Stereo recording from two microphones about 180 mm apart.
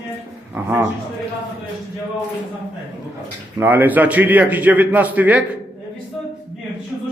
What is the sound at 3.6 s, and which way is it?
A man's voice, 10° right (ahead or behind).